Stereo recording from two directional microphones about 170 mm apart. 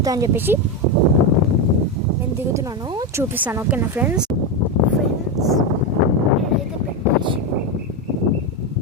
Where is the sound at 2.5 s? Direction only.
20° right (ahead or behind).